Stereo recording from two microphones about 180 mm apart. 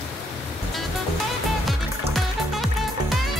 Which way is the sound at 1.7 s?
Centre (ahead or behind).